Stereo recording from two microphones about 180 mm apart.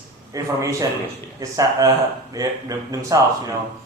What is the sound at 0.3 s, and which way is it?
Speech, 20° right (ahead or behind).